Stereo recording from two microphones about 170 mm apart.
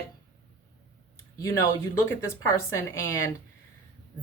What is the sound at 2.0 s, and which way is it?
Speech, 15° left (ahead or behind).